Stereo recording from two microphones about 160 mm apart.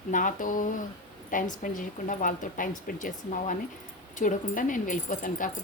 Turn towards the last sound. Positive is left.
turn(degrees=55)  # may be behind; listen again after turning